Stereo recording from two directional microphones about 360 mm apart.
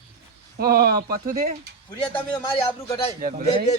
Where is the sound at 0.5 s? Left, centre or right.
Right.